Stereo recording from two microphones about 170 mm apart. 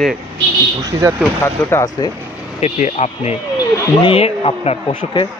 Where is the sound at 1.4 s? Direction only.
15° left (ahead or behind).